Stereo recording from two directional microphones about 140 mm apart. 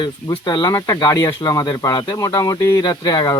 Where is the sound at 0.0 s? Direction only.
30° left (ahead or behind).